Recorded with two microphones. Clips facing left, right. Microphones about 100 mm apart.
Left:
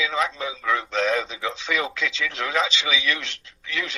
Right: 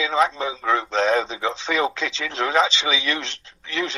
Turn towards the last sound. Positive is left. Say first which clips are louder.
# right 4 dB
turn(degrees=-30)  # may be behind; listen again after turning